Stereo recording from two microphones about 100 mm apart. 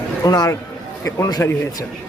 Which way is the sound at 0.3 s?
40° left (ahead or behind).